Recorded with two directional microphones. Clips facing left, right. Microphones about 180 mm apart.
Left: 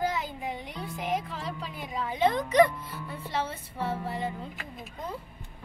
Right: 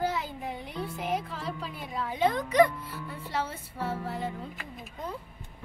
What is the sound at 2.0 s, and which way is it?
Speech, 5° right (ahead or behind).